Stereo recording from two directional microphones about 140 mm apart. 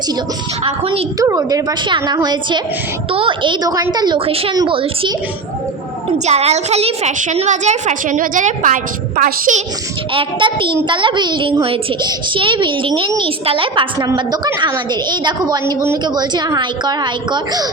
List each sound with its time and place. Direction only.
0.6 s a child's voice: 40° right (ahead or behind)
1.2 s a woman's voice: 25° right (ahead or behind)
4.3 s a woman's voice: 45° right (ahead or behind)
6.1 s a woman's voice: 50° right (ahead or behind); by 9.6 s 70° right (ahead or behind)
10.1 s a child's voice: 40° right (ahead or behind)